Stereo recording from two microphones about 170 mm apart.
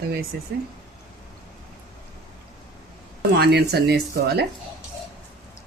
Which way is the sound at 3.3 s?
75° right (ahead or behind).